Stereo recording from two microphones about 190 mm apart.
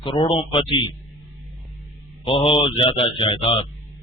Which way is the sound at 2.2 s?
25° left (ahead or behind).